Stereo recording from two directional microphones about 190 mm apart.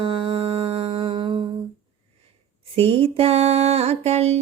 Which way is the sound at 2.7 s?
30° right (ahead or behind).